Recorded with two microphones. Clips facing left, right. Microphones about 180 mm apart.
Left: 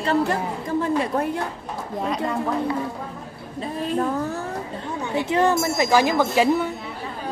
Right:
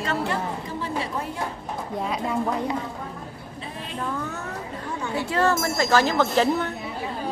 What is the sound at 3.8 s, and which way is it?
Speech, 40° left (ahead or behind).